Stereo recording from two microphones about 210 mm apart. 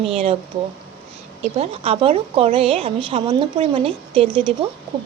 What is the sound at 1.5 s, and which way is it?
A woman's voice, 30° right (ahead or behind).